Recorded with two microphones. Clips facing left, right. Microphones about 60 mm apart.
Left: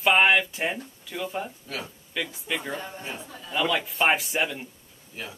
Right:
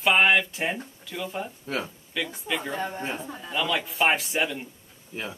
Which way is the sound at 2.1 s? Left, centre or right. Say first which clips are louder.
Right 1 dB; centre.